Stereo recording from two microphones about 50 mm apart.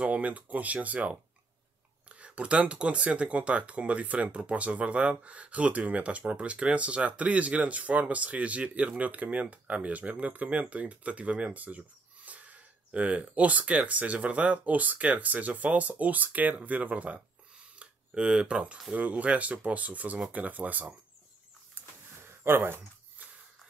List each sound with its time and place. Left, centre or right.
0.0 s speech: right
21.8 s a sound: right
22.4 s speech: right